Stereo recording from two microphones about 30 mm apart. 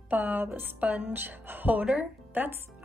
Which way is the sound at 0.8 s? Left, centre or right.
Right.